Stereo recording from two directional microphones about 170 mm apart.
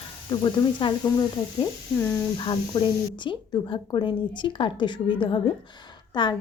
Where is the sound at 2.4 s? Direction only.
30° left (ahead or behind).